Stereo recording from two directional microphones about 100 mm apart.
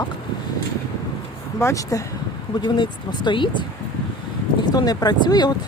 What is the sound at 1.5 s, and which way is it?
Speech, 30° left (ahead or behind).